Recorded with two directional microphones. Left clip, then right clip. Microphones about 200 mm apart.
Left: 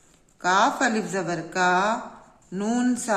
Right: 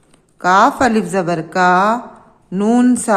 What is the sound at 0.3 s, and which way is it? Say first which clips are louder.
A man's voice: right 9 dB; 35° right (ahead or behind).